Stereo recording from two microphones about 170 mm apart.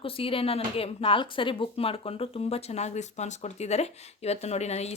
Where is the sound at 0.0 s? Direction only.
35° left (ahead or behind).